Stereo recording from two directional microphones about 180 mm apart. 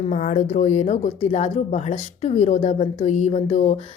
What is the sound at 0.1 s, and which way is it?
Speech, 45° left (ahead or behind).